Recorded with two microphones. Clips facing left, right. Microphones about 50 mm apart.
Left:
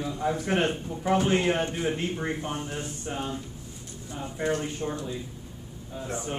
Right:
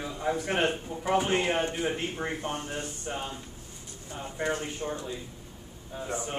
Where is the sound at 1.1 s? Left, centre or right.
Centre.